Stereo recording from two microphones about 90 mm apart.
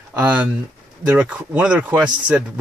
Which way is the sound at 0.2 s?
20° right (ahead or behind).